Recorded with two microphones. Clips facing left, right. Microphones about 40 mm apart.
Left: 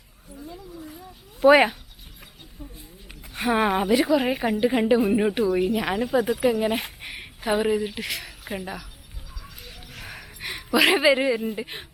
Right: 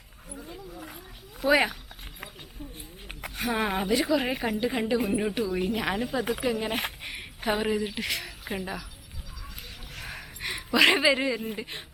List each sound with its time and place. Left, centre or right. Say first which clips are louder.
1.4 s speech: left 7 dB; left
3.3 s speech: left 6 dB; left
3.7 s a woman's voice: left 3 dB; centre
9.9 s a sound: even; centre
11.5 s a woman's voice: left 4 dB; centre